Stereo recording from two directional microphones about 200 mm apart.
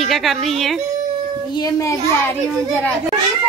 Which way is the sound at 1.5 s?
20° left (ahead or behind).